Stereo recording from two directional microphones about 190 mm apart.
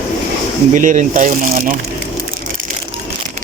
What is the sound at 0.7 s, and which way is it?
Speech, 40° right (ahead or behind).